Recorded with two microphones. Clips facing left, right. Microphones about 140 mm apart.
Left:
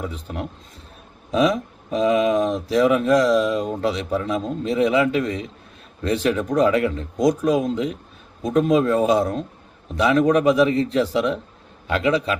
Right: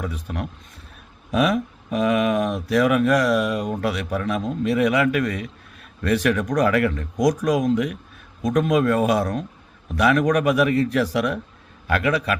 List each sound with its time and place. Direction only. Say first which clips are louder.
0.0 s speech: even; 25° left (ahead or behind)